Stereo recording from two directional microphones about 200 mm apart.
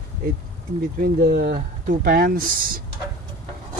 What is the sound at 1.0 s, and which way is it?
Speech, 50° right (ahead or behind).